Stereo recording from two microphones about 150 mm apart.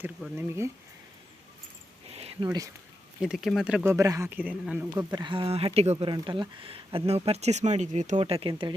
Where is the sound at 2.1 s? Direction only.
40° right (ahead or behind).